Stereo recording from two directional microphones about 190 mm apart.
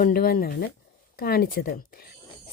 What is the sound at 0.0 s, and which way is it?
Speech, 50° left (ahead or behind).